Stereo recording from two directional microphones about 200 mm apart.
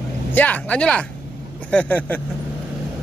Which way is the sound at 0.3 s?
10° left (ahead or behind).